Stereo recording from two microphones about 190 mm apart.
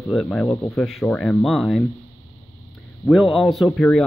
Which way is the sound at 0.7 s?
Centre (ahead or behind).